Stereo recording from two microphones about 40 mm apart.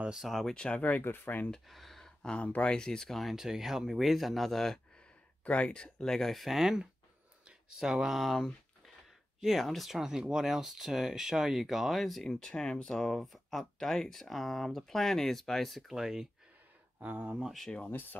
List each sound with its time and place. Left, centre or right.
0.3 s speech: centre
0.7 s speech: left
1.0 s speech: left
1.7 s a sound: centre
2.2 s speech: left; by 3.3 s centre
3.3 s speech: centre
5.4 s speech: left; by 8.2 s centre
8.2 s speech: centre
12.2 s speech: centre
15.9 s speech: centre
17.0 s speech: right